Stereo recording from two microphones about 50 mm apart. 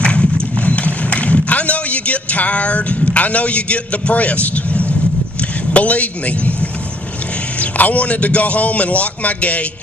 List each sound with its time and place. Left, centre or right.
0.0 s vehicle: left
5.7 s a man's voice: left
7.6 s a man's voice: left